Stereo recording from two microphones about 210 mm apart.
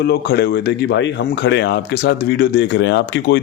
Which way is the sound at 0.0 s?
50° left (ahead or behind).